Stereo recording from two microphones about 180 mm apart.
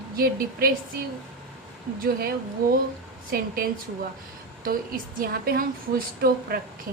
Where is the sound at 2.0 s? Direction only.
55° right (ahead or behind).